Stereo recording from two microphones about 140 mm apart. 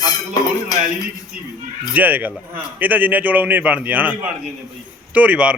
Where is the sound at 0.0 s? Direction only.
30° left (ahead or behind).